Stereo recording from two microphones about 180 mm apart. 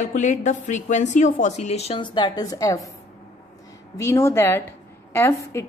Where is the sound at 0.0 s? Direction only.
45° left (ahead or behind); by 2.9 s 20° left (ahead or behind).